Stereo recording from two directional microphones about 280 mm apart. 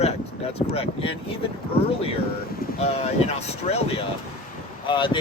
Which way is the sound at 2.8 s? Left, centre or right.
Left.